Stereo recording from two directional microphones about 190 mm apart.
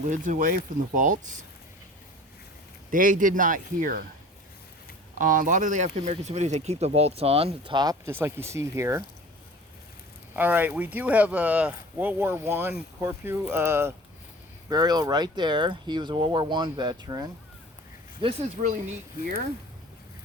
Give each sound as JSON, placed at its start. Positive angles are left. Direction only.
{"t": 0.1, "sound": "speech", "side_deg": -45}
{"t": 2.9, "sound": "speech", "side_deg": -45}
{"t": 5.1, "sound": "speech", "side_deg": -45}
{"t": 10.3, "sound": "speech", "side_deg": -10}